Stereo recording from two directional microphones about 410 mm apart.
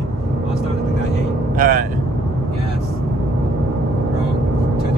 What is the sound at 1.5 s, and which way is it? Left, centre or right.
Vehicle, centre.